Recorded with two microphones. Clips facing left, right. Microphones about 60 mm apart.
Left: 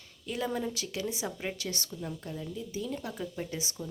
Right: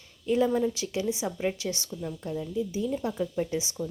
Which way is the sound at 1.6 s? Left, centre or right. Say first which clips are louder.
Right 4 dB; right.